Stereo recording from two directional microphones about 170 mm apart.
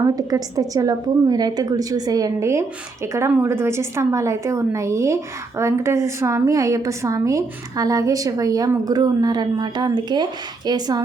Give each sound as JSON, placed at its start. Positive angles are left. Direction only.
{"t": 0.0, "sound": "a woman's voice", "side_deg": -20}